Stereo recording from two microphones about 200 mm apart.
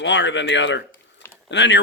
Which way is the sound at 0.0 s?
65° left (ahead or behind).